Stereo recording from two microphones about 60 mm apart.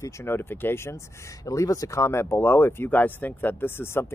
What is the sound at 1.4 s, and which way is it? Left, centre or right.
Speech, left.